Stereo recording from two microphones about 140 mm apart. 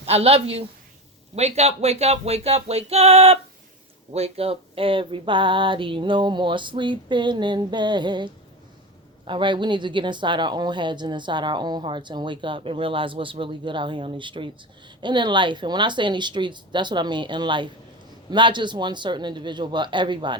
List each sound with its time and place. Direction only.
0.0 s a woman's voice: 45° right (ahead or behind)